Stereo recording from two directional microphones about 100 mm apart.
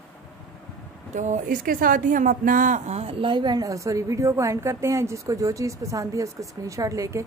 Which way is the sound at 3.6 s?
30° right (ahead or behind).